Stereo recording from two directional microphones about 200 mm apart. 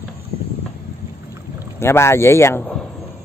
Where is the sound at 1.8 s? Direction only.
10° left (ahead or behind).